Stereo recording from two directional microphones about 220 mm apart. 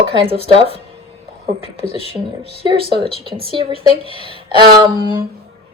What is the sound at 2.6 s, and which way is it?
A woman's voice, 25° right (ahead or behind).